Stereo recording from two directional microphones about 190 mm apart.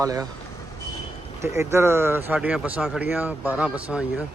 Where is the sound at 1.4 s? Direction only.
15° right (ahead or behind).